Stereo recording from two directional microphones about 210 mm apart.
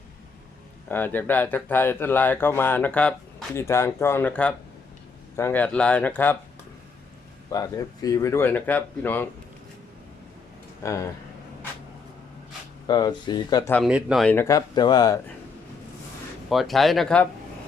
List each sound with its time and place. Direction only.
0.9 s speech: 10° left (ahead or behind)
7.5 s speech: 15° left (ahead or behind)
10.8 s speech: 15° left (ahead or behind)
12.9 s speech: 20° left (ahead or behind)
13.7 s speech: centre (ahead or behind); by 15.2 s 20° left (ahead or behind)
16.5 s speech: centre (ahead or behind)